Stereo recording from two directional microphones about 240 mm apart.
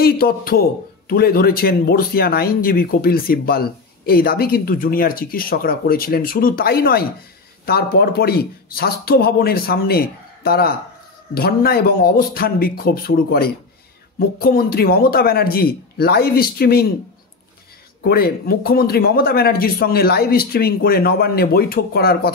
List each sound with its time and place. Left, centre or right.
0.0 s a man's voice: left
18.0 s a man's voice: left